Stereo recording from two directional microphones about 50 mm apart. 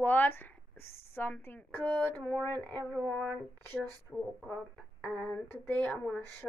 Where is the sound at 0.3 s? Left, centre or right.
Left.